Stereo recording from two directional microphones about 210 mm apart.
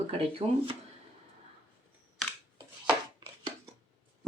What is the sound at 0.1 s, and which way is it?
Speech, 25° right (ahead or behind).